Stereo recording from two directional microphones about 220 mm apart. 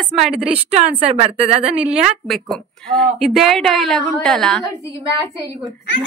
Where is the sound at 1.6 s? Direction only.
5° right (ahead or behind).